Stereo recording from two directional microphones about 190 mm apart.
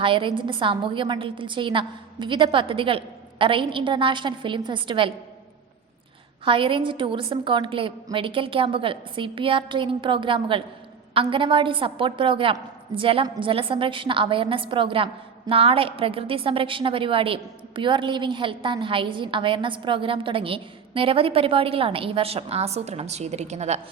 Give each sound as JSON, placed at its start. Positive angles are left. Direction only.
{"t": 0.0, "sound": "a woman's voice", "side_deg": -25}
{"t": 6.4, "sound": "a woman's voice", "side_deg": -25}